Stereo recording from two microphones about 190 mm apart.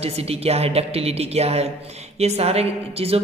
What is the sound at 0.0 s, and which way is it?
A man's voice, 30° right (ahead or behind).